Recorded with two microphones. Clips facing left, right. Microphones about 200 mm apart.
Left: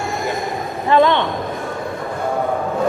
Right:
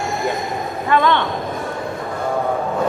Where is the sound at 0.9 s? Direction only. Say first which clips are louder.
Left 3 dB; 20° left (ahead or behind).